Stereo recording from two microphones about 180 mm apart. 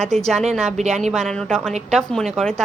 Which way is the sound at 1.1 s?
5° left (ahead or behind).